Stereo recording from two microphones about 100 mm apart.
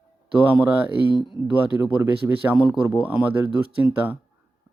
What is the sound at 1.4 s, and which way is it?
Speech, 25° right (ahead or behind).